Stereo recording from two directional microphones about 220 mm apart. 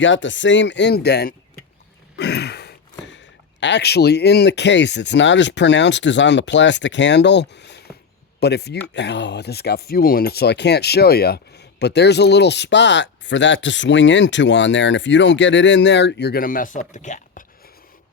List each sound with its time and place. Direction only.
0.0 s speech: 55° left (ahead or behind)
2.1 s a sound: 50° left (ahead or behind)
3.1 s speech: 55° left (ahead or behind); by 17.4 s 35° left (ahead or behind)